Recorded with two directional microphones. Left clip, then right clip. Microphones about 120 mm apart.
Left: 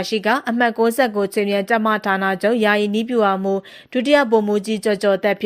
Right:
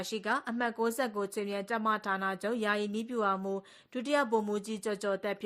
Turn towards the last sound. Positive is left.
turn(degrees=25)  # may be behind; listen again after turning